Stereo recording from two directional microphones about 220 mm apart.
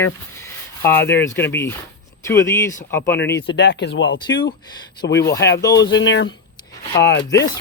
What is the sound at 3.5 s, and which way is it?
Speech, 50° left (ahead or behind).